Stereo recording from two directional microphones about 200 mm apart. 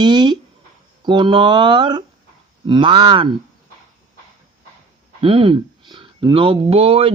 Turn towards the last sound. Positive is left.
turn(degrees=-25)  # may be behind; listen again after turning